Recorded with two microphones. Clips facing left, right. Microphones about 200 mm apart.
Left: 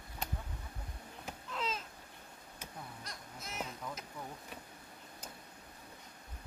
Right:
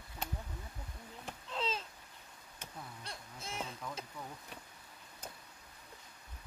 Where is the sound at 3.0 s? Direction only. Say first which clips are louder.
Right 1 dB; 30° right (ahead or behind).